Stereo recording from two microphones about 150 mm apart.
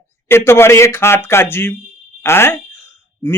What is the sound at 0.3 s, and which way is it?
A man's voice, 15° left (ahead or behind).